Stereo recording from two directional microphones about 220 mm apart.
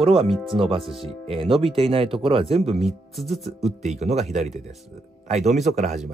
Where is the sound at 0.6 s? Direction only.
25° right (ahead or behind).